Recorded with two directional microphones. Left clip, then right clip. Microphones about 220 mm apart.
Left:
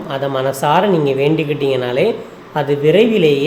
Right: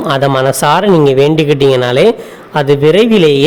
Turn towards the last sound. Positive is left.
turn(degrees=-50)  # may be behind; listen again after turning